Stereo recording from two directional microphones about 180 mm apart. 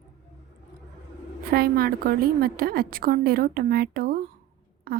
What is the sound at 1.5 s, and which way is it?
A woman's voice, 60° right (ahead or behind).